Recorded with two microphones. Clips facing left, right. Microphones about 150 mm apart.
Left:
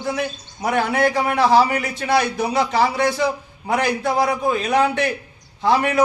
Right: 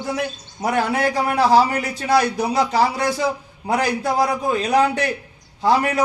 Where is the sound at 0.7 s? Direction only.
35° right (ahead or behind).